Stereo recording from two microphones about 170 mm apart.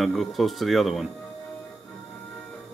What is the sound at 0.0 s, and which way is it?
Speech, centre (ahead or behind).